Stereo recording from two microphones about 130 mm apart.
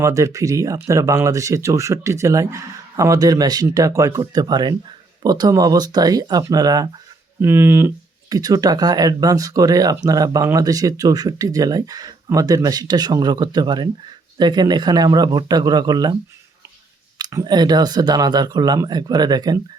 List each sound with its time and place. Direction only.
0.0 s speech: 25° right (ahead or behind)
7.4 s speech: 20° right (ahead or behind)
8.3 s speech: 30° right (ahead or behind)
17.2 s speech: 30° right (ahead or behind)